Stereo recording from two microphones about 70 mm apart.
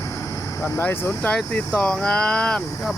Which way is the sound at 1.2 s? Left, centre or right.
Centre.